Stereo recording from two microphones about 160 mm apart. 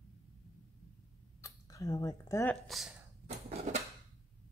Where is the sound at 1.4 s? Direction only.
20° left (ahead or behind).